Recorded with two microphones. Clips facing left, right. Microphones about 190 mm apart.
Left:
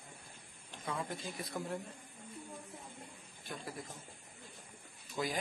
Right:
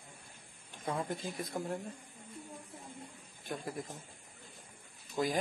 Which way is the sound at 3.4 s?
50° right (ahead or behind).